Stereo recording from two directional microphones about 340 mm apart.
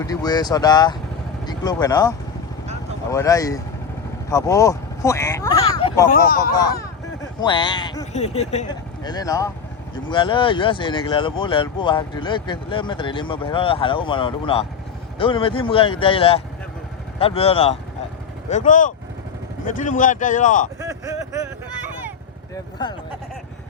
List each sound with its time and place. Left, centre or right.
0.0 s speech: centre
6.1 s speech: left
6.5 s speech: centre
20.7 s speech: centre
22.8 s speech: centre